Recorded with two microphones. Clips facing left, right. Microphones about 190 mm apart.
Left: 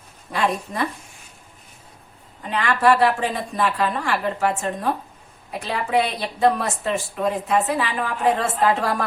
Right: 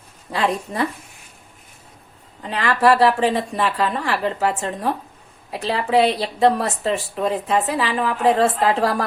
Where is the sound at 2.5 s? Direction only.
35° right (ahead or behind).